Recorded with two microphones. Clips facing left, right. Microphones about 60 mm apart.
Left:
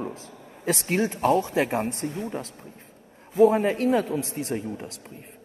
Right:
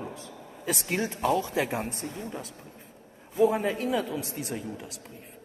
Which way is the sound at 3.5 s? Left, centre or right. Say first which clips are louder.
Left 5 dB; left.